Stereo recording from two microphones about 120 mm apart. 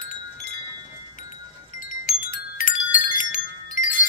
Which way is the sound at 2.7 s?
90° left.